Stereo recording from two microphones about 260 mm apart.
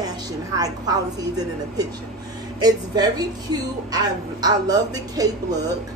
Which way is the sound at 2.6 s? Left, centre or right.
Centre.